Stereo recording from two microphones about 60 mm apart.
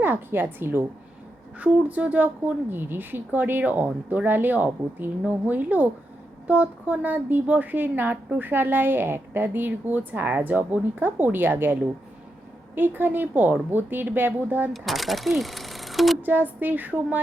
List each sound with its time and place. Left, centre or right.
0.0 s a woman's voice: right
1.5 s a woman's voice: right
3.6 s a woman's voice: right
14.7 s speech: centre
16.2 s speech: right